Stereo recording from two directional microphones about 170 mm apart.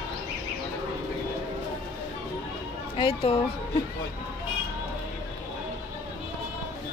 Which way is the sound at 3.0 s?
30° left (ahead or behind).